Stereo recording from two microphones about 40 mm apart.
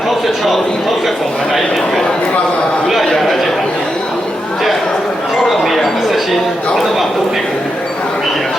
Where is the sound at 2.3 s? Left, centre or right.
Left.